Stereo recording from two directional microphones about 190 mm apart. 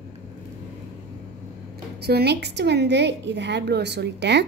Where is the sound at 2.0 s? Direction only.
55° right (ahead or behind).